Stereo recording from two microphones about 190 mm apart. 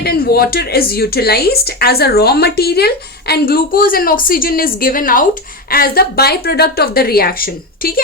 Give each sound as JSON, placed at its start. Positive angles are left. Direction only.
{"t": 0.0, "sound": "speech", "side_deg": 55}